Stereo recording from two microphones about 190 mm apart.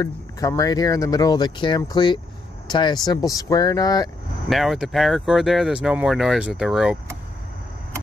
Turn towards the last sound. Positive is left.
turn(degrees=0)  # may be behind; listen again after turning